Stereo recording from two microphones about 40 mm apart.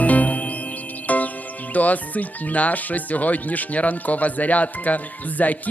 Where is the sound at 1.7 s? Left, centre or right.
Left.